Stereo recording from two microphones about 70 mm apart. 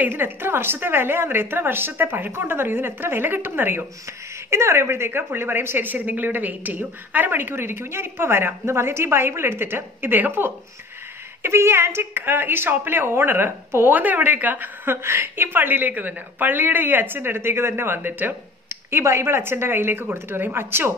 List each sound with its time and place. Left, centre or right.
0.0 s a woman's voice: right
4.5 s a woman's voice: right